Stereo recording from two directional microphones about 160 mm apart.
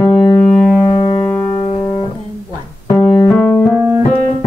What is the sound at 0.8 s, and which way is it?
Music, 35° left (ahead or behind).